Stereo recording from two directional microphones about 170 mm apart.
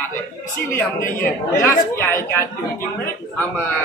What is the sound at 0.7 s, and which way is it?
Speech, 15° left (ahead or behind).